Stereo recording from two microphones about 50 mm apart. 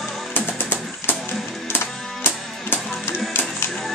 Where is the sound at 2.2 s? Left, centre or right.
Left.